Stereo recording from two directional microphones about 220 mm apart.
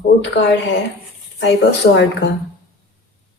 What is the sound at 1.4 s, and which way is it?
Speech, 50° left (ahead or behind).